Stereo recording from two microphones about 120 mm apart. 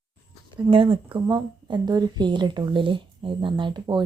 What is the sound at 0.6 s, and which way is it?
A woman's voice, 50° right (ahead or behind).